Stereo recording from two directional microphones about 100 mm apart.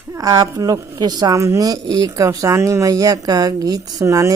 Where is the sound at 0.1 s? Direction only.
35° right (ahead or behind).